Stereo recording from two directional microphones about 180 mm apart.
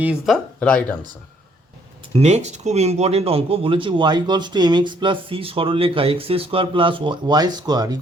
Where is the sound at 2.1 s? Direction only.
35° right (ahead or behind).